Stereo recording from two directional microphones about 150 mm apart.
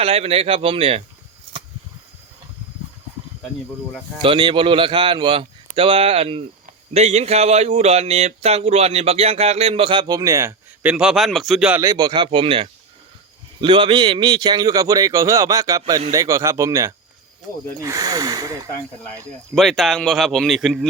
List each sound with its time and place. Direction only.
0.0 s speech: 40° right (ahead or behind)
4.2 s speech: 35° right (ahead or behind)
10.8 s a man's voice: 5° right (ahead or behind)
11.8 s a man's voice: 25° right (ahead or behind)
19.5 s a man's voice: centre (ahead or behind)